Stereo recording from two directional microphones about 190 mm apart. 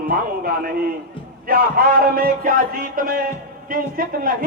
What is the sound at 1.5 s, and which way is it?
A man's voice, 50° right (ahead or behind).